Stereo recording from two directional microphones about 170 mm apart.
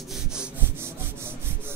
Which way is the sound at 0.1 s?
5° right (ahead or behind).